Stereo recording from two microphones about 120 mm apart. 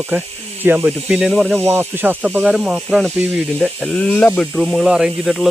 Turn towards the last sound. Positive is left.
turn(degrees=0)  # may be behind; listen again after turning